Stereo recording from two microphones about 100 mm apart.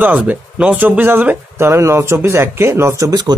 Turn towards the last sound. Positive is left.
turn(degrees=-40)  # may be behind; listen again after turning